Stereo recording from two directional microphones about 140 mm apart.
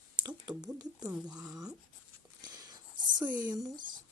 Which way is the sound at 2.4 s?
30° right (ahead or behind).